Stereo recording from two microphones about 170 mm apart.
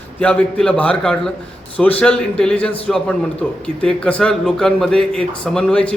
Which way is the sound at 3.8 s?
5° left (ahead or behind).